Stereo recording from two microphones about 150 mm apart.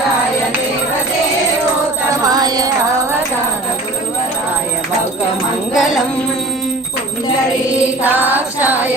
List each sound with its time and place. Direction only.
2.2 s music: 25° right (ahead or behind)
5.7 s music: centre (ahead or behind)
8.0 s music: 10° right (ahead or behind)